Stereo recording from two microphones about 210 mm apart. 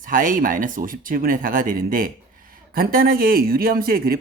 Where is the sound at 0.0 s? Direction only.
40° right (ahead or behind).